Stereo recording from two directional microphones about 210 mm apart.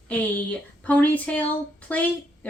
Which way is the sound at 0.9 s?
5° left (ahead or behind).